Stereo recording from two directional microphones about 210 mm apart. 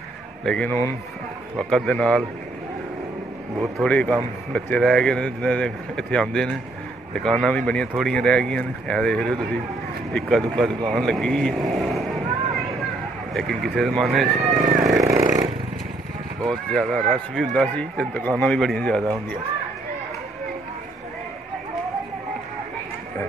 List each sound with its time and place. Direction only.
0.5 s a man's voice: 10° left (ahead or behind)
3.7 s a man's voice: 5° left (ahead or behind)
13.3 s speech: centre (ahead or behind)
15.0 s a sound: 15° right (ahead or behind)
16.4 s speech: centre (ahead or behind)